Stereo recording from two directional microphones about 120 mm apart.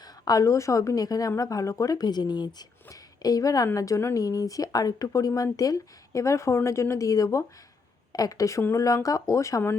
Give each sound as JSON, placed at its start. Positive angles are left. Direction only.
{"t": 0.0, "sound": "a woman's voice", "side_deg": 30}